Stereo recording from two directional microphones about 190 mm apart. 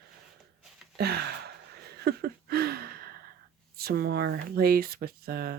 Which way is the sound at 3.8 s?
55° right (ahead or behind).